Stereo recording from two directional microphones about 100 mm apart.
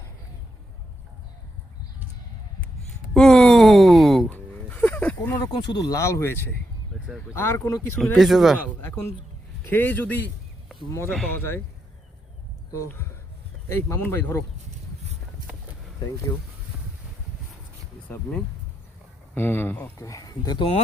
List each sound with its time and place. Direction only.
3.2 s a sound: 5° left (ahead or behind)
4.3 s a sound: 15° left (ahead or behind)
5.5 s speech: 45° left (ahead or behind)
6.0 s speech: 30° left (ahead or behind)
8.1 s speech: centre (ahead or behind)
8.8 s speech: 20° left (ahead or behind)
11.3 s speech: 20° left (ahead or behind)
13.7 s speech: 25° left (ahead or behind)
19.3 s speech: 20° left (ahead or behind)
20.0 s speech: 35° left (ahead or behind)
20.6 s speech: 80° left